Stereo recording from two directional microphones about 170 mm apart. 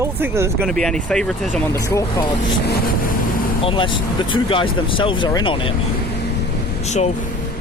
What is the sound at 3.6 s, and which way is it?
Speech, 30° left (ahead or behind).